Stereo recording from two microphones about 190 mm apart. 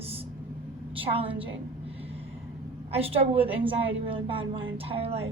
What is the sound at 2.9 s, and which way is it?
A woman's voice, 30° right (ahead or behind).